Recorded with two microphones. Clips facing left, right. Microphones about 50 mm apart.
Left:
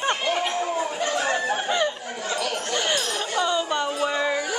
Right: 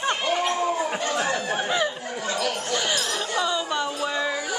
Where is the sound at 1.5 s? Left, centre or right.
Centre.